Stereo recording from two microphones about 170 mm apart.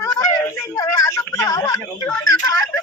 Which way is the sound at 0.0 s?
15° left (ahead or behind).